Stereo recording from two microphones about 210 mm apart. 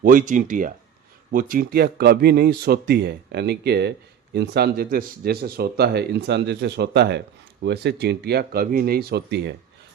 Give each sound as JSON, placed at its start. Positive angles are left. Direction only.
{"t": 0.0, "sound": "speech", "side_deg": -40}